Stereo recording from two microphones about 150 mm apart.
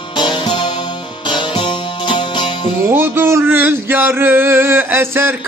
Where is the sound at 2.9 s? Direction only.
15° right (ahead or behind).